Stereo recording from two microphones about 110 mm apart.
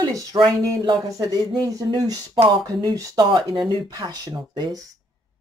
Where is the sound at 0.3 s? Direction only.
40° right (ahead or behind).